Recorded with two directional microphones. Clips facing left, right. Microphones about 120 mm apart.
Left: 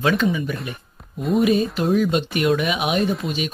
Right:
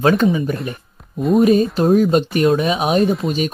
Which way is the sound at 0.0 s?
40° right (ahead or behind).